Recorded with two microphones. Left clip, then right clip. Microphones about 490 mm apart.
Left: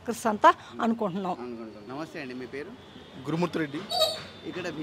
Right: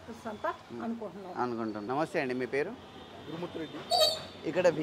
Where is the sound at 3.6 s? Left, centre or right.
Left.